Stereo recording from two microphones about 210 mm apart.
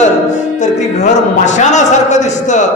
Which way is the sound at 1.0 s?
35° left (ahead or behind).